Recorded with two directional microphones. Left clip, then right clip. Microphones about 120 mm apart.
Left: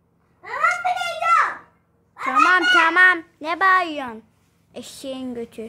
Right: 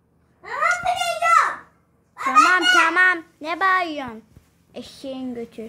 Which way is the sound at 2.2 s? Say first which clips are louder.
Right 1 dB; 10° left (ahead or behind).